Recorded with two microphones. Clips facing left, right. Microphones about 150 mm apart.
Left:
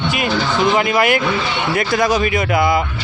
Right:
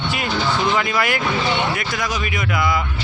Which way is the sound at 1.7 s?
30° left (ahead or behind).